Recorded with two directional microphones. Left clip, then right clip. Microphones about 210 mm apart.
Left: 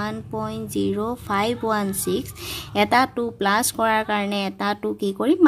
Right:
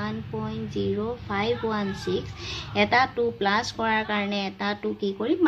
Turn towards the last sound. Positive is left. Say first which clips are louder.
# left 5 dB
turn(degrees=45)  # may be behind; listen again after turning